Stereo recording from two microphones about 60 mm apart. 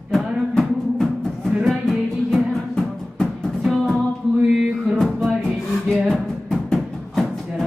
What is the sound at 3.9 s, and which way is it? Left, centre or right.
Music, right.